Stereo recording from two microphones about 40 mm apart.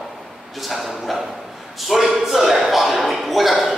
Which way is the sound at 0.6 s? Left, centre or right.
Centre.